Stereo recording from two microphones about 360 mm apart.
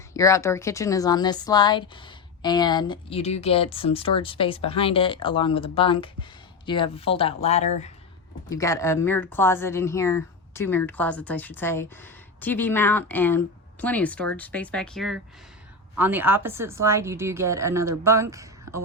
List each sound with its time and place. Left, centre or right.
0.1 s a woman's voice: centre